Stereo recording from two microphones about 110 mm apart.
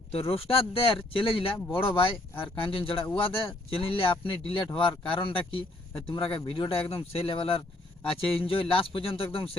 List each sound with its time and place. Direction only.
0.1 s speech: 65° left (ahead or behind)